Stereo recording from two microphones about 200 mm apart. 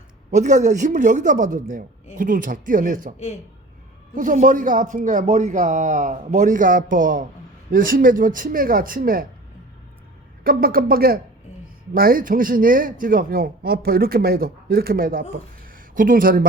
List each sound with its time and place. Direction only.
0.3 s speech: 35° right (ahead or behind)
10.4 s speech: 45° right (ahead or behind)
15.6 s a sound: 45° right (ahead or behind)